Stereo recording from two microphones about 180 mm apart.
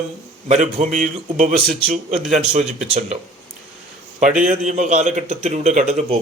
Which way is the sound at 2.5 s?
40° right (ahead or behind).